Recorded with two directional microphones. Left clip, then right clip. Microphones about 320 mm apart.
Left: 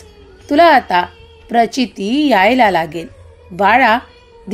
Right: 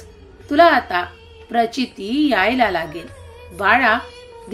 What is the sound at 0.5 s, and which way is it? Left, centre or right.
A woman's voice, left.